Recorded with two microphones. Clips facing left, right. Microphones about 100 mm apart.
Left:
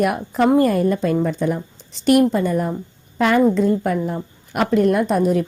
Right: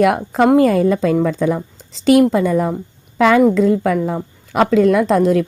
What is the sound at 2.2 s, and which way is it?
Speech, 90° right.